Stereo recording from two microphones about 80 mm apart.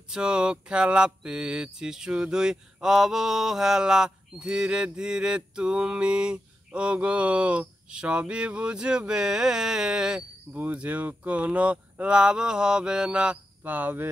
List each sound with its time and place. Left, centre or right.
0.1 s mantra: centre
10.5 s mantra: right